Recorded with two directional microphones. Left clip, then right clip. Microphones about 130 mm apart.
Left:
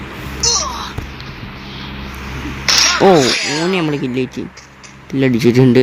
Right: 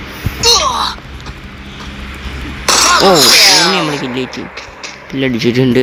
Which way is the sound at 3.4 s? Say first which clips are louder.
Right 9 dB; 90° right.